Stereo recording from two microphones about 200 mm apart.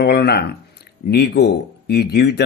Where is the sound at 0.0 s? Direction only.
55° left (ahead or behind).